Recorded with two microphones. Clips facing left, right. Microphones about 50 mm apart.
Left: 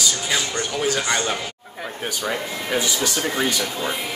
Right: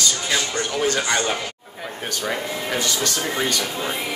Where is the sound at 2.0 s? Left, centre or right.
Centre.